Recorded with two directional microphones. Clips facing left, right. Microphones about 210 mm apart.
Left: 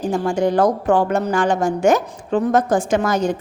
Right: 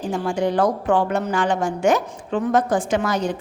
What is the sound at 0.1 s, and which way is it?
A woman's voice, 45° left (ahead or behind).